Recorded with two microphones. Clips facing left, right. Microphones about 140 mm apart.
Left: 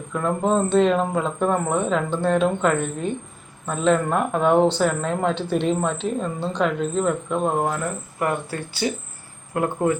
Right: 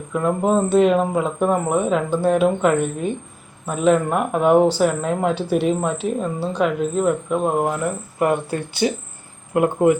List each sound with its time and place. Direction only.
0.1 s speech: 10° right (ahead or behind)
8.2 s speech: 20° right (ahead or behind)